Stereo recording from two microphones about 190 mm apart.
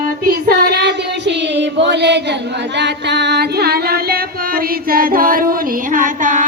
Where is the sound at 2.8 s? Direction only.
65° right (ahead or behind); by 6.4 s 45° right (ahead or behind).